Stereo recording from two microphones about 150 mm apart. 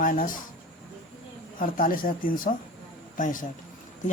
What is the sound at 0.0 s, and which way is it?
Speech, 65° left (ahead or behind).